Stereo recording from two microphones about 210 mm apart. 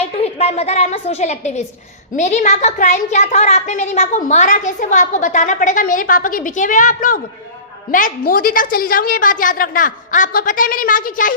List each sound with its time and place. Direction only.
0.0 s speech: 30° left (ahead or behind)